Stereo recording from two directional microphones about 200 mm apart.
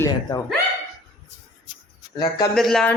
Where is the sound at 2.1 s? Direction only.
20° left (ahead or behind).